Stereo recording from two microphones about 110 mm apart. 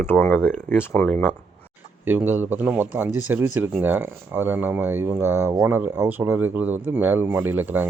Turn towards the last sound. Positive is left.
turn(degrees=-15)  # may be behind; listen again after turning